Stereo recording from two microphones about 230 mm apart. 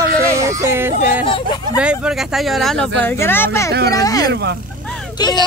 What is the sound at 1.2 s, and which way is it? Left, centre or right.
Speech, left.